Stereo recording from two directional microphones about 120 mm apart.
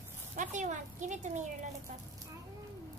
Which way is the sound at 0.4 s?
90° right.